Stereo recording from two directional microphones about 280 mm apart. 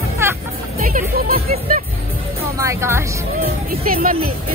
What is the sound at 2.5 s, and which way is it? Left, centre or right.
Speech, centre.